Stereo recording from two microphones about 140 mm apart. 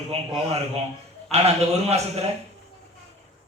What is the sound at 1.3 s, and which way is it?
Speech, 50° right (ahead or behind).